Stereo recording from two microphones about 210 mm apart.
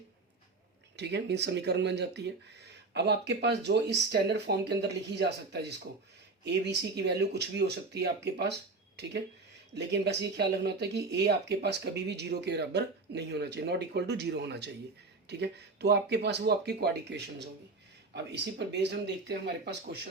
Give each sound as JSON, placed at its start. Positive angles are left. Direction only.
{"t": 0.9, "sound": "speech", "side_deg": -55}